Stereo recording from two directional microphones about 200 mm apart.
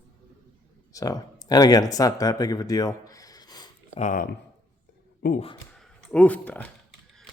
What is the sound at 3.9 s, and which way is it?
Speech, 40° left (ahead or behind).